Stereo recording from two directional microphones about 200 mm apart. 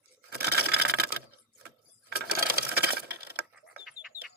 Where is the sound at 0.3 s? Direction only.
50° right (ahead or behind).